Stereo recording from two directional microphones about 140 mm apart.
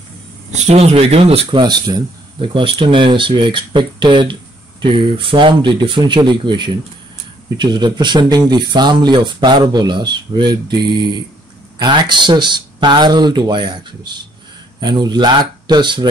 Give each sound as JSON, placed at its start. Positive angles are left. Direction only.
{"t": 0.5, "sound": "speech", "side_deg": -55}